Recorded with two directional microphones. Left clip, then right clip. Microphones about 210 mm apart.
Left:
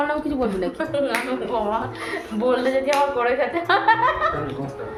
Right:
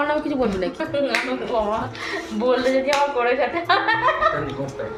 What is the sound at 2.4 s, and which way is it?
A woman's voice, 10° left (ahead or behind).